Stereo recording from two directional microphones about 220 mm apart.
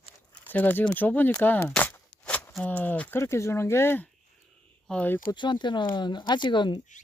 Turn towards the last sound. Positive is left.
turn(degrees=20)  # may be behind; listen again after turning